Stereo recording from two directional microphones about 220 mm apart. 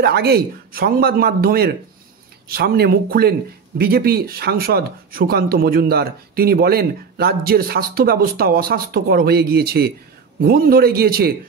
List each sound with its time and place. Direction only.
0.0 s speech: 45° right (ahead or behind)